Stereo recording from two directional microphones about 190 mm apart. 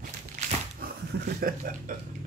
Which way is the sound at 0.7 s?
50° right (ahead or behind).